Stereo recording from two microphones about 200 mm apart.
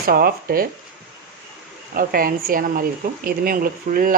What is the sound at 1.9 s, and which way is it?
Speech, 45° right (ahead or behind).